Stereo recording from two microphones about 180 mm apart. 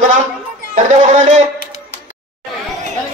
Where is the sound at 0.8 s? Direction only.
40° right (ahead or behind).